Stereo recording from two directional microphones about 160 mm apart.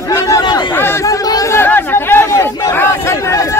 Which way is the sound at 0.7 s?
15° left (ahead or behind).